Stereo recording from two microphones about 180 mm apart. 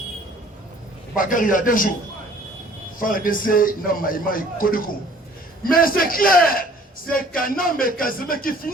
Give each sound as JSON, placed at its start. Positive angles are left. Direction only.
{"t": 1.1, "sound": "a man's voice", "side_deg": 50}
{"t": 3.0, "sound": "a man's voice", "side_deg": 50}